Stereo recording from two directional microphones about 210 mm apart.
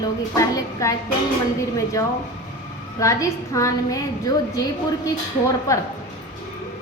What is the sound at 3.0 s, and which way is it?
A woman's voice, 15° left (ahead or behind).